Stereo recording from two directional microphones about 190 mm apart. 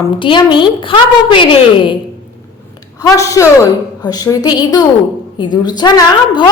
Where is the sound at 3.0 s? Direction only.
15° left (ahead or behind).